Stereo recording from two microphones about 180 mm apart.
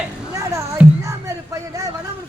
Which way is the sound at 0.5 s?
15° right (ahead or behind).